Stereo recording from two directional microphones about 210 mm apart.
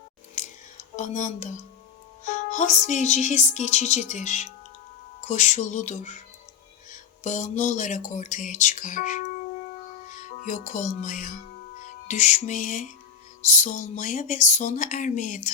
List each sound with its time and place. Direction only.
0.3 s a sound: 35° left (ahead or behind)
2.5 s speech: 35° left (ahead or behind)
7.3 s speech: 35° left (ahead or behind)
10.2 s speech: 35° left (ahead or behind)
11.8 s music: 35° left (ahead or behind)
13.4 s speech: 35° left (ahead or behind)